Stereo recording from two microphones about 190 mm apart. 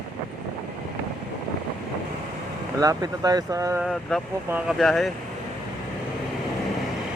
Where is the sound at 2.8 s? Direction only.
20° right (ahead or behind).